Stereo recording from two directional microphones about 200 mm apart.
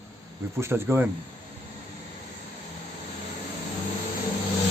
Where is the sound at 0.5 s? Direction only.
10° right (ahead or behind).